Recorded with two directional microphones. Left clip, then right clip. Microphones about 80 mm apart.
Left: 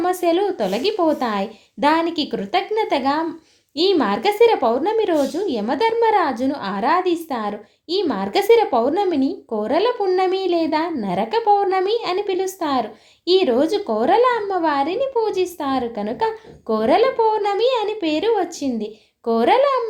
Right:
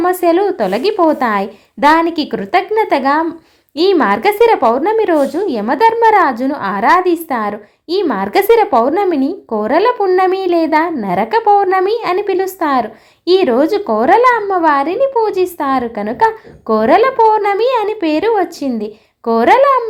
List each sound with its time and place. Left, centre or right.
0.0 s a woman's voice: right